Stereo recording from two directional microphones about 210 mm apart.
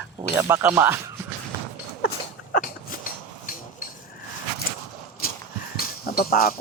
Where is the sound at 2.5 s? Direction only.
40° left (ahead or behind).